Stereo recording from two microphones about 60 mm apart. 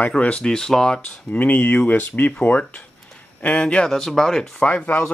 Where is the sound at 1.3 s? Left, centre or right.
Left.